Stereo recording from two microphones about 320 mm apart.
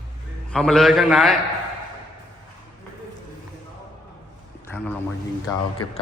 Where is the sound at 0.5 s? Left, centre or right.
Centre.